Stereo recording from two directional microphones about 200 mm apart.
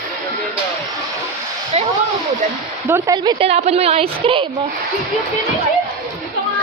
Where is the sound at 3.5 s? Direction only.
30° right (ahead or behind).